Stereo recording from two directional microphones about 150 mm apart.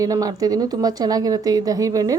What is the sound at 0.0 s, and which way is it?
Speech, 25° right (ahead or behind).